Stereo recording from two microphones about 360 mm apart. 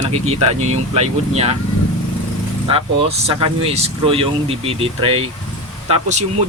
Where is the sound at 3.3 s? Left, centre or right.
Centre.